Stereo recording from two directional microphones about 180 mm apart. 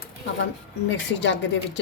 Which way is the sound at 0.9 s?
85° left.